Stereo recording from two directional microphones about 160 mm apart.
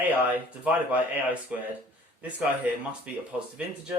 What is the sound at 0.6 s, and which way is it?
Speech, 10° right (ahead or behind).